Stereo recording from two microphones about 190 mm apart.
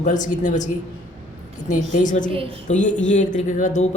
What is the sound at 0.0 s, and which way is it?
A man's voice, 40° left (ahead or behind).